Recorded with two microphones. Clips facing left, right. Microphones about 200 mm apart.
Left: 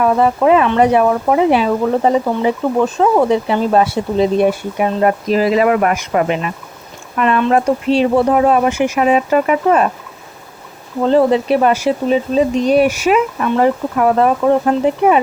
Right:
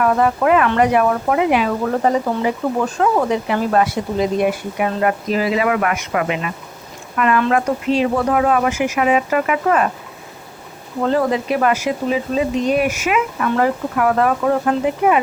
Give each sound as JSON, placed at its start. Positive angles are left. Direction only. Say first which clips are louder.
{"t": 0.0, "sound": "speech", "louder": "left 3 dB", "side_deg": 25}
{"t": 11.0, "sound": "speech", "louder": "left 5 dB", "side_deg": 25}